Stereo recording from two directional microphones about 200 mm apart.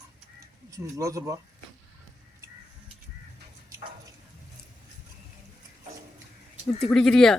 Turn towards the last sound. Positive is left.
turn(degrees=5)  # may be behind; listen again after turning